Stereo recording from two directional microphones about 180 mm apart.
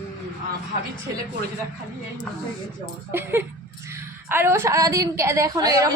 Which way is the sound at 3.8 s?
15° right (ahead or behind).